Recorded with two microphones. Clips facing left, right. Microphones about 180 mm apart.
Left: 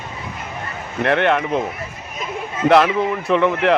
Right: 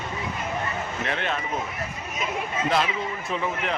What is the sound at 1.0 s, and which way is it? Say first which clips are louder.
Speech: left 14 dB; 65° left (ahead or behind).